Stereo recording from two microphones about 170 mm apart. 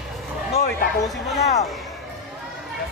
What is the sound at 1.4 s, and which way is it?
Speech, 40° left (ahead or behind).